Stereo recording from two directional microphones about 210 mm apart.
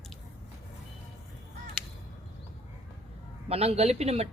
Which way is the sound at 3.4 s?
30° right (ahead or behind).